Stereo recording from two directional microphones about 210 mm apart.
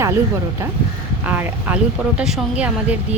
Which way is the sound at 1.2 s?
10° right (ahead or behind).